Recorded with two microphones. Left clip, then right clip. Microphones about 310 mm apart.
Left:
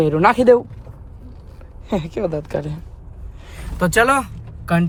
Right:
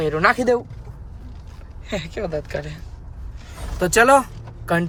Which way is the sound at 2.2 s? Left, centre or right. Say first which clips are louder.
Left 3 dB; left.